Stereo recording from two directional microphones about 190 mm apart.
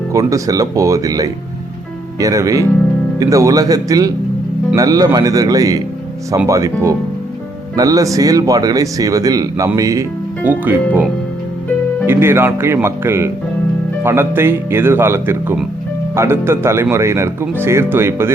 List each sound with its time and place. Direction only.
0.1 s speech: 15° right (ahead or behind)